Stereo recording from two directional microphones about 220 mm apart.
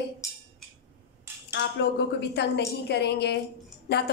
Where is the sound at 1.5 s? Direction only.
50° left (ahead or behind).